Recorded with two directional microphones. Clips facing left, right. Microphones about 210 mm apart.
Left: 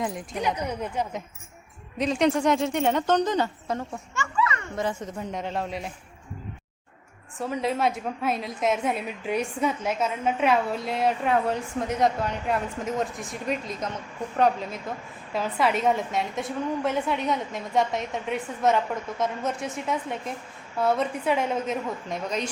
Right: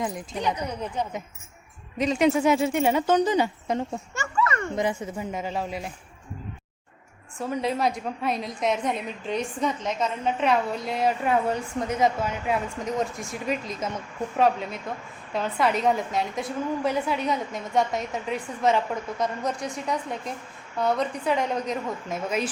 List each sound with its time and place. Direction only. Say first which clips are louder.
0.0 s a woman's voice: even; centre (ahead or behind)
4.1 s a sound: even; 45° right (ahead or behind)
4.7 s a woman's voice: right 2 dB; 15° right (ahead or behind)
7.3 s a woman's voice: even; centre (ahead or behind)